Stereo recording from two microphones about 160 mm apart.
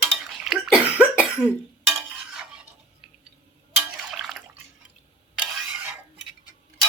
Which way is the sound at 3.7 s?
5° right (ahead or behind).